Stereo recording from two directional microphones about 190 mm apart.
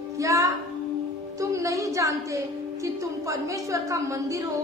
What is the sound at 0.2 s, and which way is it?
Child singing, 15° right (ahead or behind).